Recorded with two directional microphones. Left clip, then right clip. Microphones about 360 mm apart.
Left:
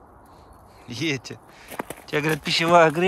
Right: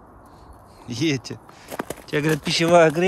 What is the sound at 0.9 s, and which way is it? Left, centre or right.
Speech, centre.